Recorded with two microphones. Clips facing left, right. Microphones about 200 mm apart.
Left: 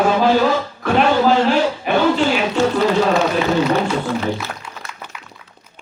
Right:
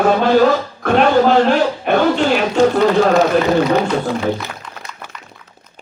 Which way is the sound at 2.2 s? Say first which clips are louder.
Right 2 dB; 45° right (ahead or behind).